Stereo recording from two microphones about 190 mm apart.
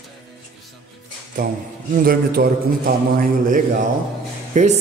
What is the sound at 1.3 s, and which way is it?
A man's voice, 45° right (ahead or behind).